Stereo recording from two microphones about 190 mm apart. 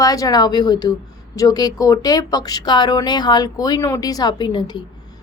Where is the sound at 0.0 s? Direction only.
20° left (ahead or behind).